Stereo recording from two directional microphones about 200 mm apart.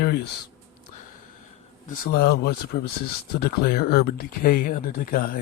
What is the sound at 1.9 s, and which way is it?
Speech, 50° left (ahead or behind).